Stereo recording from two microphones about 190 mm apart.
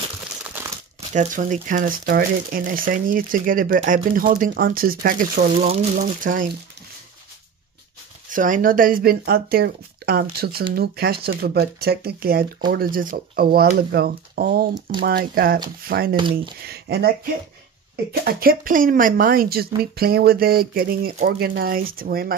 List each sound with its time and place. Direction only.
1.1 s speech: 45° right (ahead or behind)
8.3 s speech: 45° right (ahead or behind)
16.2 s speech: 25° right (ahead or behind)
16.6 s speech: 55° right (ahead or behind)